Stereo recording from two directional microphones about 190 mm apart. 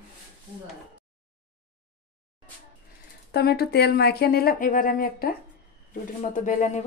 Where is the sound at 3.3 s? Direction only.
55° left (ahead or behind).